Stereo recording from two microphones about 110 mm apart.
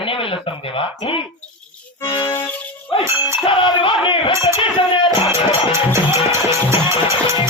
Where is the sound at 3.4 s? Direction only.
50° left (ahead or behind).